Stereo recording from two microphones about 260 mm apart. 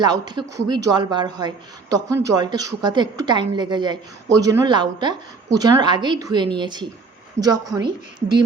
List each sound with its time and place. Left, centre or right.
0.0 s a woman's voice: centre